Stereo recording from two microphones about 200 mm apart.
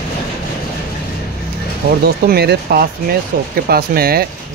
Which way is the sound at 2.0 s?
50° right (ahead or behind).